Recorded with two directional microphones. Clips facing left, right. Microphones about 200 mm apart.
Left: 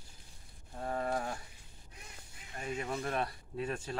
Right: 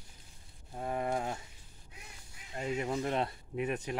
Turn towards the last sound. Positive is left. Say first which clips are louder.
# right 3 dB
turn(degrees=-20)  # may be behind; listen again after turning